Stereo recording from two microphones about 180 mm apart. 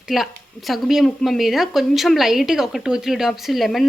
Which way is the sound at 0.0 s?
Centre (ahead or behind).